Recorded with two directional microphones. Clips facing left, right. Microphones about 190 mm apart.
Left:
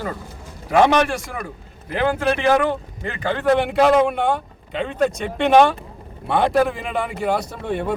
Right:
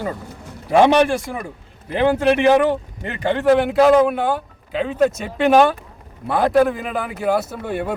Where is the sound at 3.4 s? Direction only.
Centre (ahead or behind).